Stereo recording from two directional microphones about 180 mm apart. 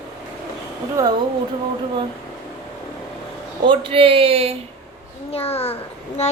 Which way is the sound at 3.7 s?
30° right (ahead or behind).